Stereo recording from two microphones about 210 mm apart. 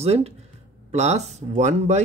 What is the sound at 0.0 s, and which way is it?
Speech, 30° right (ahead or behind).